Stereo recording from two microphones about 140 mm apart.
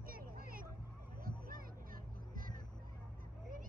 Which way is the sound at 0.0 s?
90° right.